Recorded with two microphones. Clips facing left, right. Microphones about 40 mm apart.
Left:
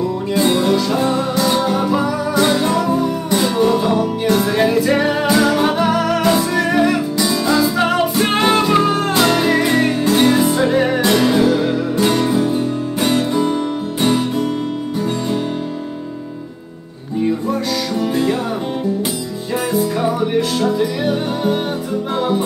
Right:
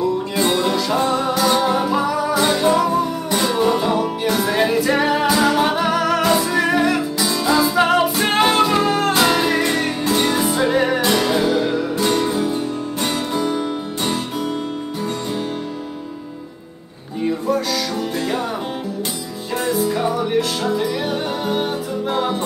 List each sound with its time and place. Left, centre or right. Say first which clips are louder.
0.0 s music: left 2 dB; centre
17.2 s music: left 1 dB; centre
19.7 s music: left 1 dB; centre